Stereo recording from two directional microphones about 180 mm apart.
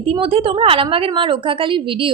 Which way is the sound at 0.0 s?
30° right (ahead or behind).